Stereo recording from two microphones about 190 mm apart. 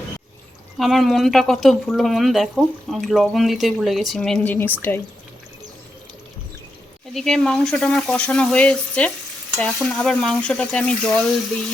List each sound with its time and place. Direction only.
0.8 s speech: centre (ahead or behind)
7.1 s speech: centre (ahead or behind)